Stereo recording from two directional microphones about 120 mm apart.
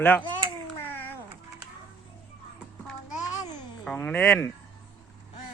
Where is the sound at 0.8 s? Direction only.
15° left (ahead or behind).